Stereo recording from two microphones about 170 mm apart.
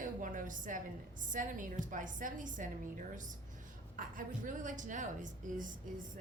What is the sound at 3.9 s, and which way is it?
A woman's voice, 50° right (ahead or behind).